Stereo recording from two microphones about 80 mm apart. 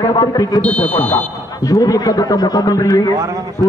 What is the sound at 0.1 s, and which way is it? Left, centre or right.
Speech, left.